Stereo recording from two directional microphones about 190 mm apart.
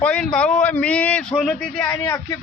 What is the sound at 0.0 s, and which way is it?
A man's voice, 5° left (ahead or behind).